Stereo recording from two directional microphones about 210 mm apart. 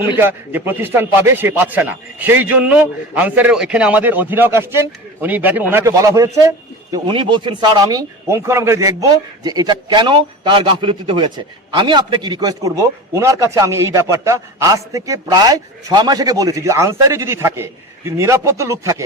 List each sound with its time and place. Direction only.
0.2 s a man's voice: 10° right (ahead or behind)